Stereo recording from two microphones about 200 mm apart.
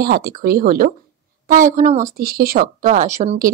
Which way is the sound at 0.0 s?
50° right (ahead or behind).